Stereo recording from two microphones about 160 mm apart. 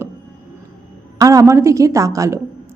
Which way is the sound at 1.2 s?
20° right (ahead or behind).